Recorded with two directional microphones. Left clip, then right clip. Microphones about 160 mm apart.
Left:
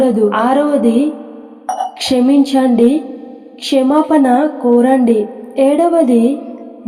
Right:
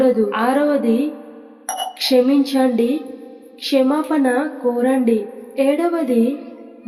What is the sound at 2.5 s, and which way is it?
Speech, 15° left (ahead or behind).